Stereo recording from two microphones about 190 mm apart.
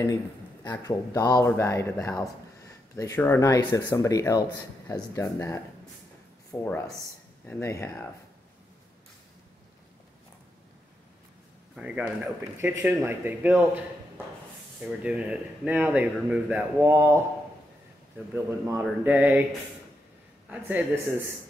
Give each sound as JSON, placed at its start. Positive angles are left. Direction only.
{"t": 0.7, "sound": "speech", "side_deg": 20}
{"t": 11.7, "sound": "speech", "side_deg": -5}
{"t": 14.8, "sound": "speech", "side_deg": -5}
{"t": 18.3, "sound": "speech", "side_deg": -10}
{"t": 20.4, "sound": "speech", "side_deg": -10}